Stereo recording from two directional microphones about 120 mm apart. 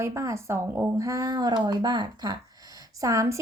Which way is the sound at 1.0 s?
30° right (ahead or behind).